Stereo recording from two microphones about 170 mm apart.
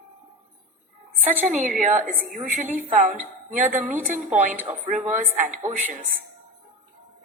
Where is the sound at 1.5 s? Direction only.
50° right (ahead or behind).